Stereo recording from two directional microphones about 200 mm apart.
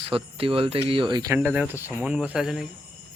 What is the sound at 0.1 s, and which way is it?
Speech, 25° right (ahead or behind).